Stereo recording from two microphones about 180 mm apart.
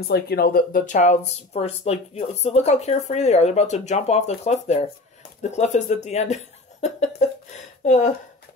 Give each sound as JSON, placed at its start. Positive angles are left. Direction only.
{"t": 0.1, "sound": "speech", "side_deg": 60}